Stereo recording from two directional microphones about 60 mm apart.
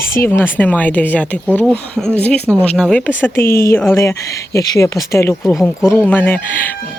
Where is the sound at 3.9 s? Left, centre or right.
Left.